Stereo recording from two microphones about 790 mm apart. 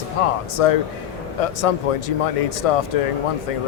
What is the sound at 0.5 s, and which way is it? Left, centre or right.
Speech, left.